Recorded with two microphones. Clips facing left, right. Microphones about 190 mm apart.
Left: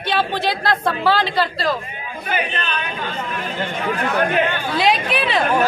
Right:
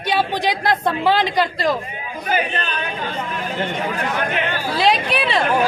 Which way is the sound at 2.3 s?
40° right (ahead or behind).